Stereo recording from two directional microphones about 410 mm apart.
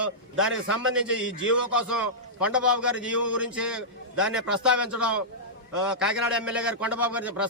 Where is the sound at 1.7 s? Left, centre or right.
Centre.